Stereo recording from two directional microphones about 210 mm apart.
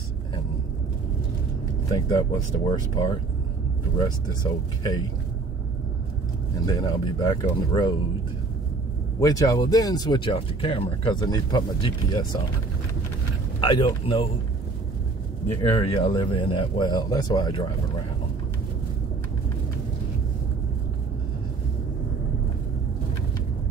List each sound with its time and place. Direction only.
1.9 s speech: 20° left (ahead or behind)
4.3 s speech: 20° left (ahead or behind)
6.6 s speech: 20° left (ahead or behind)
9.2 s speech: 15° left (ahead or behind)
13.6 s speech: 20° left (ahead or behind)
15.8 s speech: 25° left (ahead or behind)